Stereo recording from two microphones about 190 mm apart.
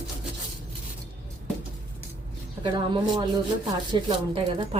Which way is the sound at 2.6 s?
25° right (ahead or behind).